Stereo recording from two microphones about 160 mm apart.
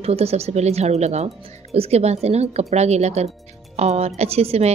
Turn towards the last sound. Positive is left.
turn(degrees=-40)  # may be behind; listen again after turning